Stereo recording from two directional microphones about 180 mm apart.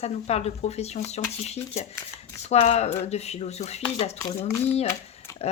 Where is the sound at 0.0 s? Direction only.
35° left (ahead or behind).